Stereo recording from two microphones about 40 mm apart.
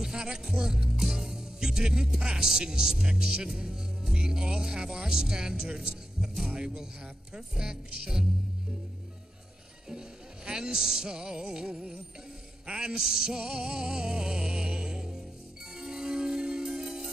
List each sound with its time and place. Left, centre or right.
0.0 s music: centre
1.0 s speech: centre
3.5 s music: centre
9.8 s music: centre